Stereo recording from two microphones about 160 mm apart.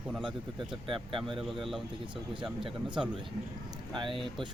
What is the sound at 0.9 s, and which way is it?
Speech, 35° right (ahead or behind).